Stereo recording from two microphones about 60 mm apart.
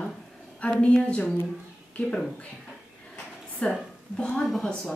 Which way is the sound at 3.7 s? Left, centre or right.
Centre.